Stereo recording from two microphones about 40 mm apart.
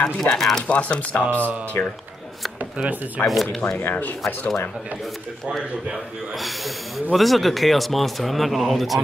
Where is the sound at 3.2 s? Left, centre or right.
Left.